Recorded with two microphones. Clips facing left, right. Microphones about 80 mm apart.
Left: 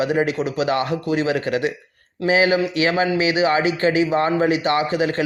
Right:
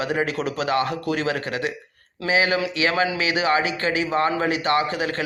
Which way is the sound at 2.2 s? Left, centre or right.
Left.